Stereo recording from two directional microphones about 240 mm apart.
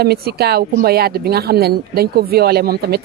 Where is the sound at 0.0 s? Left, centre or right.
Right.